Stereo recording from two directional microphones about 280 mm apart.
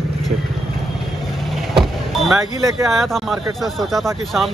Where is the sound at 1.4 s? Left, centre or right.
Centre.